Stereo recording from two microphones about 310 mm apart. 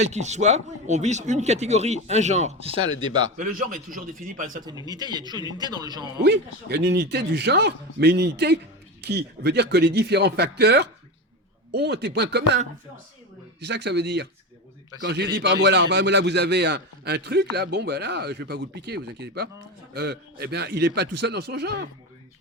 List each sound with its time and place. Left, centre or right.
0.0 s speech: right
3.4 s speech: right
4.9 s speech: centre
6.2 s a man's voice: right